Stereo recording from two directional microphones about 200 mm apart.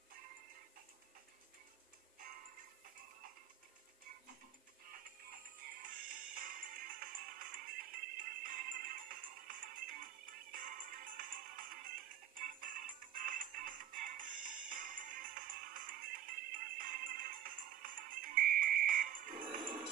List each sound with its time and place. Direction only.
5.7 s music: 45° right (ahead or behind)